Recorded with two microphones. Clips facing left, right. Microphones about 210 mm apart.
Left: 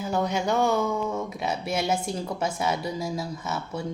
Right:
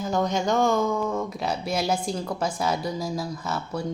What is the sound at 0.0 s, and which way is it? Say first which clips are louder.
A woman's voice: right 1 dB; 10° left (ahead or behind).